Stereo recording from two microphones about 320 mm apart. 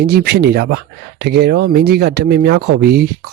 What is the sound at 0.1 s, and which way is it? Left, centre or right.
Speech, right.